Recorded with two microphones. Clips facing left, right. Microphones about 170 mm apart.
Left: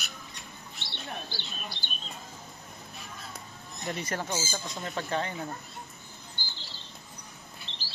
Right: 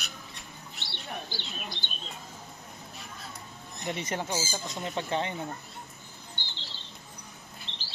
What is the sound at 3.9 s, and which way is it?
Speech, 20° right (ahead or behind).